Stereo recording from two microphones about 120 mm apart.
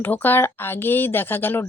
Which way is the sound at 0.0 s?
15° left (ahead or behind).